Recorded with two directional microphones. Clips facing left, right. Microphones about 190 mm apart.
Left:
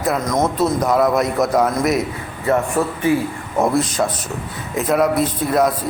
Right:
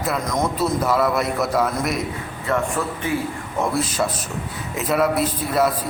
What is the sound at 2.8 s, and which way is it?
Speech, 30° left (ahead or behind).